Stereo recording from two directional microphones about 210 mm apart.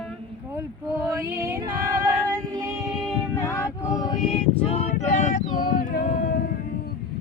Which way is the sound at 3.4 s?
10° left (ahead or behind).